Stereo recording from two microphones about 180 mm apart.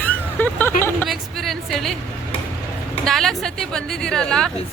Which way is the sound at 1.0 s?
Centre (ahead or behind).